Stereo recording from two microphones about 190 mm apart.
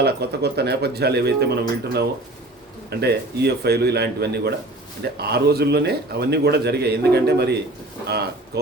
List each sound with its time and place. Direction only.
0.0 s speech: 60° right (ahead or behind)